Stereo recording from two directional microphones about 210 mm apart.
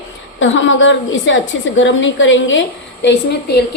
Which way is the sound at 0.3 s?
65° left (ahead or behind).